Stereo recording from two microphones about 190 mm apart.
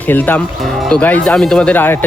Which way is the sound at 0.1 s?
10° left (ahead or behind).